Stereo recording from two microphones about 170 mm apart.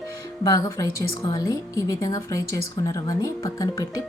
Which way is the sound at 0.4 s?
20° left (ahead or behind).